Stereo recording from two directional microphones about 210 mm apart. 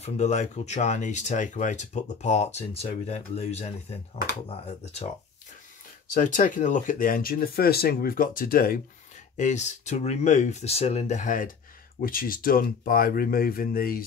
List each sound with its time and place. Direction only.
0.0 s speech: 35° left (ahead or behind)
6.1 s speech: 40° left (ahead or behind)